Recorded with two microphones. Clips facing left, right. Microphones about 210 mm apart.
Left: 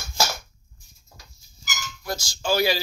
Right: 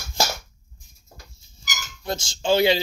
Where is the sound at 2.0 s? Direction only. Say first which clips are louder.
Right 4 dB; 25° right (ahead or behind).